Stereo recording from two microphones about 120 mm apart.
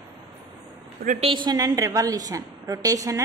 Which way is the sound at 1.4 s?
30° right (ahead or behind).